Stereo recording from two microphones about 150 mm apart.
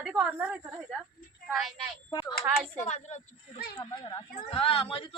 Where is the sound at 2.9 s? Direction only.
50° left (ahead or behind).